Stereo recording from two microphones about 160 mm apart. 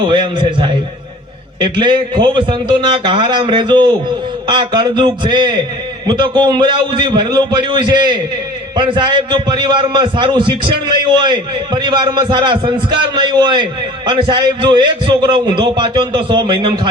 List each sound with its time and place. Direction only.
0.0 s a man's voice: 30° right (ahead or behind)